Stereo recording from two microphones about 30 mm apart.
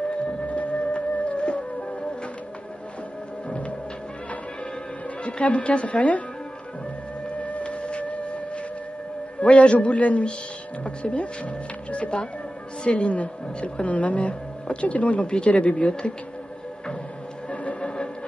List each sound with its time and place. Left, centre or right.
0.5 s music: left
3.4 s music: left
5.2 s a woman's voice: left
7.2 s music: left
7.8 s a sound: left
9.4 s a woman's voice: left
13.8 s a woman's voice: left
17.5 s music: left